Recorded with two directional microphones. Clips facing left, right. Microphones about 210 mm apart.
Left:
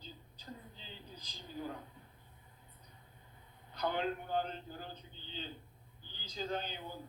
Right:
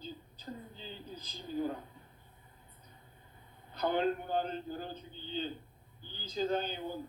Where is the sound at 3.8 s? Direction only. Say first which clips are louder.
Right 5 dB; 50° right (ahead or behind).